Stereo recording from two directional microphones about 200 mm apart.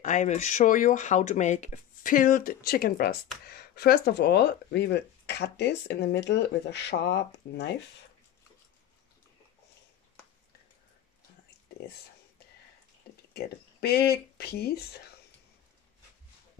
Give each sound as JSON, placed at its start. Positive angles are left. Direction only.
{"t": 0.0, "sound": "speech", "side_deg": 35}
{"t": 13.3, "sound": "speech", "side_deg": 50}